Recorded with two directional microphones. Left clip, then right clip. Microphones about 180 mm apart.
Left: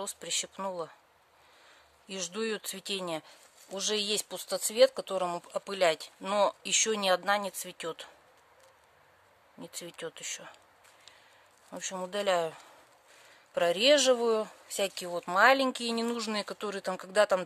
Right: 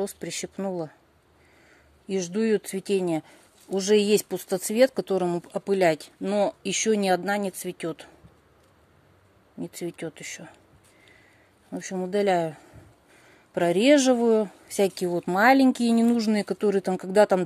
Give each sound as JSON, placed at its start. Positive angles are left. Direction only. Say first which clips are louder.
{"t": 0.0, "sound": "speech", "louder": "right 4 dB", "side_deg": 0}
{"t": 2.0, "sound": "speech", "louder": "right 9 dB", "side_deg": 0}
{"t": 3.9, "sound": "speech", "louder": "right 12 dB", "side_deg": 10}
{"t": 4.3, "sound": "speech", "louder": "right 6 dB", "side_deg": -10}
{"t": 6.3, "sound": "speech", "louder": "right 2 dB", "side_deg": 70}
{"t": 6.8, "sound": "speech", "louder": "right 5 dB", "side_deg": 0}
{"t": 9.9, "sound": "speech", "louder": "right 4 dB", "side_deg": 0}
{"t": 11.7, "sound": "speech", "louder": "right 7 dB", "side_deg": 0}
{"t": 13.6, "sound": "speech", "louder": "right 4 dB", "side_deg": 0}
{"t": 15.0, "sound": "speech", "louder": "right 3 dB", "side_deg": -5}